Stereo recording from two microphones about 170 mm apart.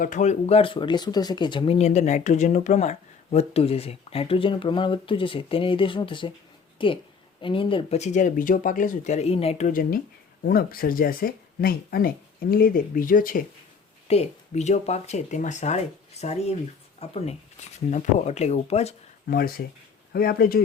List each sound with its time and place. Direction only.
0.0 s speech: 45° left (ahead or behind)
14.1 s speech: 40° left (ahead or behind)
19.3 s speech: 60° left (ahead or behind)